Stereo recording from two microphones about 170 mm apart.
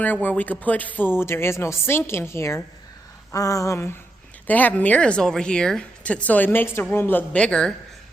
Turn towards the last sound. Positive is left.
turn(degrees=5)  # may be behind; listen again after turning